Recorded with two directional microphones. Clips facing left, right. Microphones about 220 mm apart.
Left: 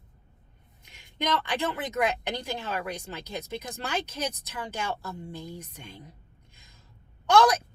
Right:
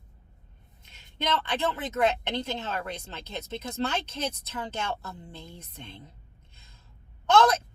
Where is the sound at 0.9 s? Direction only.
15° left (ahead or behind).